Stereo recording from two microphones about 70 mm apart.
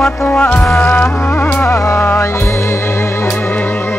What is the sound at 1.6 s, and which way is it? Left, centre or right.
Music, left.